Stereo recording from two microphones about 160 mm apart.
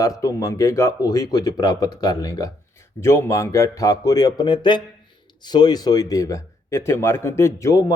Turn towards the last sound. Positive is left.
turn(degrees=20)  # may be behind; listen again after turning